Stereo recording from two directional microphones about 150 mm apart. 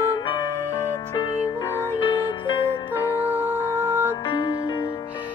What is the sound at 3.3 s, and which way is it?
Music, 15° right (ahead or behind).